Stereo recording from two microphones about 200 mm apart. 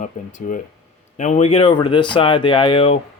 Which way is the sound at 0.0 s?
40° left (ahead or behind).